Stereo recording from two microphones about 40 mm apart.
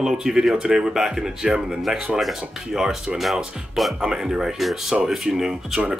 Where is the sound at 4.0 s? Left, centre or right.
Centre.